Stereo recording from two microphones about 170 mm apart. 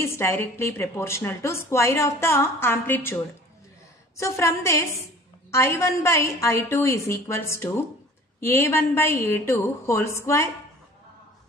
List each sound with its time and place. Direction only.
0.0 s a woman's voice: 15° left (ahead or behind)
4.2 s a woman's voice: 15° left (ahead or behind)